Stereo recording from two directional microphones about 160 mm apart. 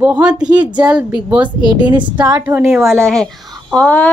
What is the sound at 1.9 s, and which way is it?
Speech, 25° right (ahead or behind).